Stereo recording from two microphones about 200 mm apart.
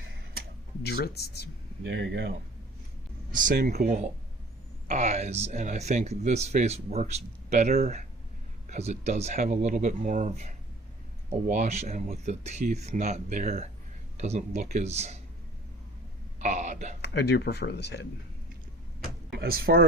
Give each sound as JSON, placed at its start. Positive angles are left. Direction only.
{"t": 0.9, "sound": "speech", "side_deg": 50}
{"t": 1.8, "sound": "speech", "side_deg": -65}
{"t": 3.3, "sound": "speech", "side_deg": -45}
{"t": 4.9, "sound": "speech", "side_deg": -35}
{"t": 16.4, "sound": "speech", "side_deg": -35}
{"t": 17.0, "sound": "speech", "side_deg": 55}
{"t": 19.4, "sound": "speech", "side_deg": -50}